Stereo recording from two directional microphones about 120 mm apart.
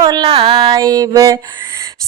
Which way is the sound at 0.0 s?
35° right (ahead or behind).